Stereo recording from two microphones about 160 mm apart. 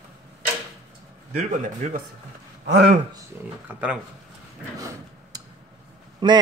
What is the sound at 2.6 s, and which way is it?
Speech, 70° right (ahead or behind).